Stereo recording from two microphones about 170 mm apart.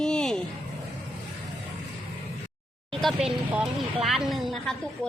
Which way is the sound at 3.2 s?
Centre (ahead or behind).